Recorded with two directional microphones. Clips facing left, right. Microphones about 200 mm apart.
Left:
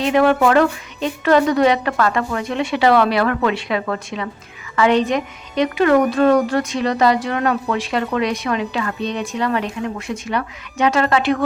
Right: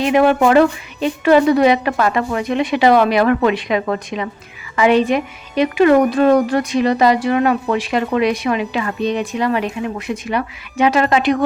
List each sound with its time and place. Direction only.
0.0 s a woman's voice: 15° right (ahead or behind)